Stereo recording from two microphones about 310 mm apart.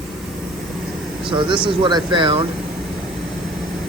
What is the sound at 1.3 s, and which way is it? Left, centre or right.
Speech, centre.